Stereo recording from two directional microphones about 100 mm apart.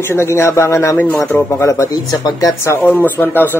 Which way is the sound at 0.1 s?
25° left (ahead or behind).